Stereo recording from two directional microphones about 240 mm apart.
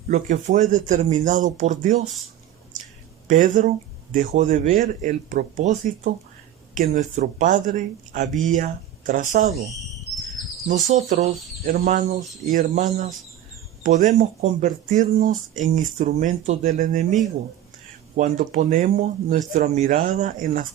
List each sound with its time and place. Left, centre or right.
0.1 s speech: right
3.2 s speech: right
10.9 s speech: right